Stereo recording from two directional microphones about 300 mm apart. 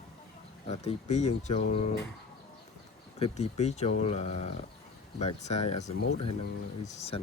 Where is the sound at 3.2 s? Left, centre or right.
Left.